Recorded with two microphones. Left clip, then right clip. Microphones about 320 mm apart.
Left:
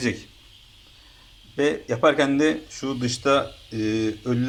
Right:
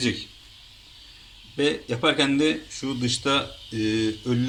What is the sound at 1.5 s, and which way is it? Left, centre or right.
Speech, centre.